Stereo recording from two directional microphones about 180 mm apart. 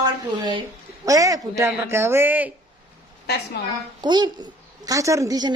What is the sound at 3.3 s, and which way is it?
Speech, 65° left (ahead or behind).